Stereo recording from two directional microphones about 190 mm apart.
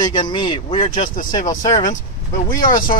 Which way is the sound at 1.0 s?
45° left (ahead or behind).